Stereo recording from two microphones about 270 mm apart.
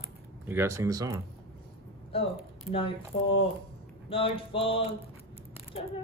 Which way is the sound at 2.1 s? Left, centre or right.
Left.